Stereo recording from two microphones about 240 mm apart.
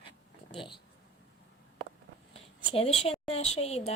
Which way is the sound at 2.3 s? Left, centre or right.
Left.